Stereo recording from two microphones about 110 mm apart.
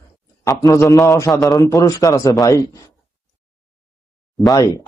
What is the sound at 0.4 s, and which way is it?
A man's voice, 30° left (ahead or behind).